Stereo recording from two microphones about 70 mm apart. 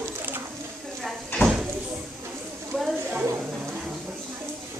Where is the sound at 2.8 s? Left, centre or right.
Centre.